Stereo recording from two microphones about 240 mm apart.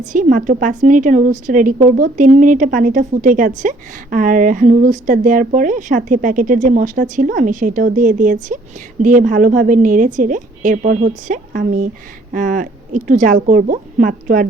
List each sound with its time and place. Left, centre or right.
0.0 s a woman's voice: right